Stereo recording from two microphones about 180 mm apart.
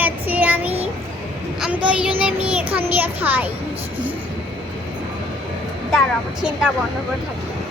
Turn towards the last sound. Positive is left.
turn(degrees=0)  # may be behind; listen again after turning